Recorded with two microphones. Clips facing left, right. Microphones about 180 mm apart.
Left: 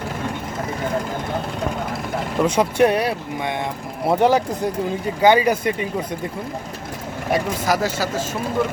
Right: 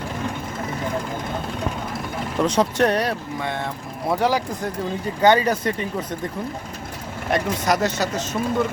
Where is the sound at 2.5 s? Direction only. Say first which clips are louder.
Left 3 dB; 10° left (ahead or behind).